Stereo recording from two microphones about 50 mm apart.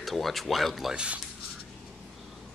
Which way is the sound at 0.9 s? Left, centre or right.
Centre.